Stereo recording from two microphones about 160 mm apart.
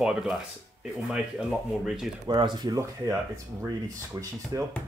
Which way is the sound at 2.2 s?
30° right (ahead or behind).